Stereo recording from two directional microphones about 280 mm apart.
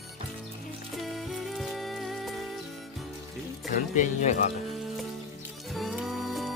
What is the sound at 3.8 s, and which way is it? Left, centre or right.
Speech, left.